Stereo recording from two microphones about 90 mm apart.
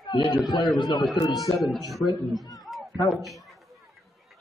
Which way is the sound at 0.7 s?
55° left (ahead or behind).